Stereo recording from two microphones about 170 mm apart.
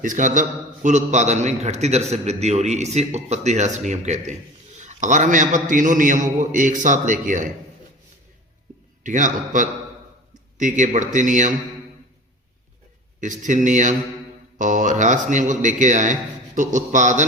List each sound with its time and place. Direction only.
0.0 s a man's voice: 50° right (ahead or behind)
9.0 s a man's voice: 50° right (ahead or behind)
13.1 s a man's voice: 50° right (ahead or behind)